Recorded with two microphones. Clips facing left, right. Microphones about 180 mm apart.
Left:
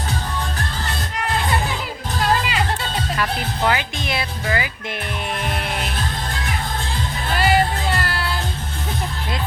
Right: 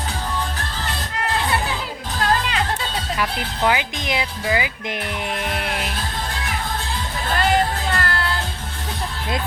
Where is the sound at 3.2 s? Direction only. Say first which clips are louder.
Even; 15° right (ahead or behind).